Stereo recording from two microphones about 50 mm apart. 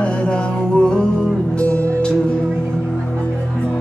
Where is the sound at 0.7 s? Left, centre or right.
Centre.